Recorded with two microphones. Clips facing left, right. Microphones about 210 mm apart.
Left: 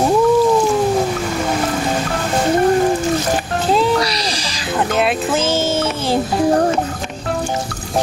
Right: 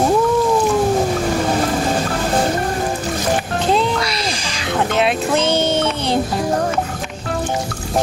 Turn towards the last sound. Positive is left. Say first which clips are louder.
# even
turn(degrees=5)  # may be behind; listen again after turning